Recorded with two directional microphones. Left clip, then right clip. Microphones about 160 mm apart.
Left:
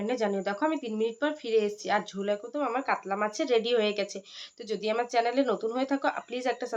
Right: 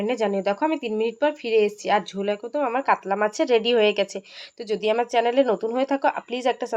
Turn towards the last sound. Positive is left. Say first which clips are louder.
# right 6 dB
turn(degrees=-30)  # may be behind; listen again after turning